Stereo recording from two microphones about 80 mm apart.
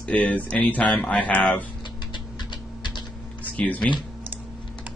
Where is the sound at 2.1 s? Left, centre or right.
Left.